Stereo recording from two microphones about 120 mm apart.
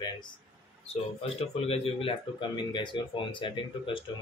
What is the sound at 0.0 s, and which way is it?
Speech, 40° left (ahead or behind).